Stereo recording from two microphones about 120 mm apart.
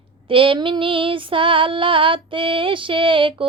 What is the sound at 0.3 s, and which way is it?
Speech, 45° right (ahead or behind).